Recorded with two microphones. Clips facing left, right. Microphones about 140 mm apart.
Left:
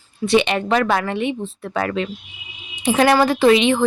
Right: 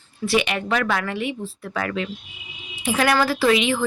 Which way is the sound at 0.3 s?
30° left (ahead or behind).